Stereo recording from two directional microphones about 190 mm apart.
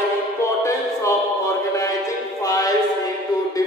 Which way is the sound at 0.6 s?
15° left (ahead or behind).